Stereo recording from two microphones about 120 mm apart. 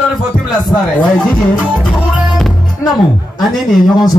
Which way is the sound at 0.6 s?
35° left (ahead or behind).